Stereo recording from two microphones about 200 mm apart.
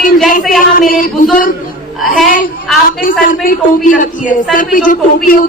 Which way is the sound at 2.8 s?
45° left (ahead or behind).